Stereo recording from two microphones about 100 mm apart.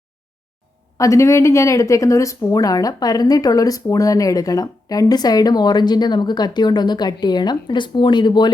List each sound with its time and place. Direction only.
0.9 s speech: 30° left (ahead or behind); by 8.4 s 50° left (ahead or behind)